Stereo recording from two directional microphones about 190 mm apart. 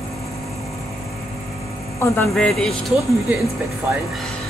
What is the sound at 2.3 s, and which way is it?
Speech, centre (ahead or behind).